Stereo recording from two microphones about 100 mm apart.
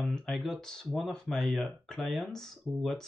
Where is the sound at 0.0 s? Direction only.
5° left (ahead or behind).